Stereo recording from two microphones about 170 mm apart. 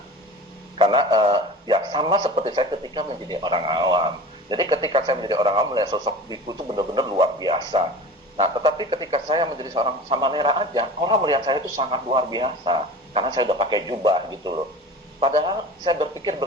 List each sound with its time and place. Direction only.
0.8 s a man's voice: 25° right (ahead or behind)